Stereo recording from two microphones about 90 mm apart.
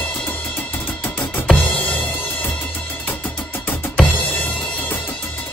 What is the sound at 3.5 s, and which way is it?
Drum, 20° left (ahead or behind).